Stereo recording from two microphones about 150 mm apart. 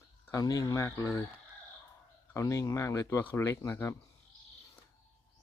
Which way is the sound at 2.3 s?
20° left (ahead or behind).